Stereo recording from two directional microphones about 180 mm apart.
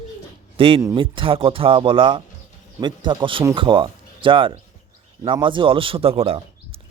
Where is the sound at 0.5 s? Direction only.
30° right (ahead or behind).